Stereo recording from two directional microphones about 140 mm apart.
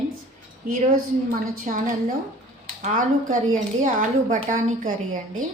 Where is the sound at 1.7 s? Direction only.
65° right (ahead or behind).